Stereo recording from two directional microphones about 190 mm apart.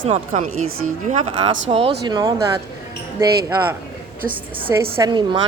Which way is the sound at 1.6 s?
30° right (ahead or behind).